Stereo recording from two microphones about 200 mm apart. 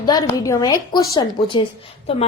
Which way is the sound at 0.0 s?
20° left (ahead or behind).